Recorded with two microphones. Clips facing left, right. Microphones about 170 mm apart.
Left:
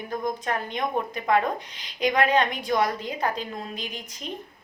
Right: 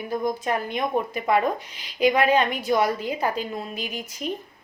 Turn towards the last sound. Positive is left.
turn(degrees=-5)  # may be behind; listen again after turning